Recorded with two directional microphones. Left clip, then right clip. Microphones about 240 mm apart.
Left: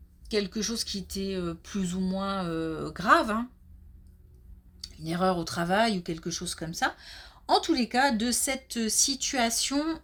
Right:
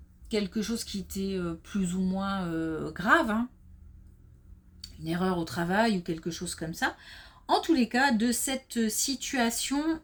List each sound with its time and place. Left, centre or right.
0.3 s speech: left
4.8 s speech: left